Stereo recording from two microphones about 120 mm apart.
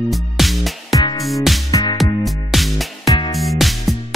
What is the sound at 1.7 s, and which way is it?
Music, 30° left (ahead or behind).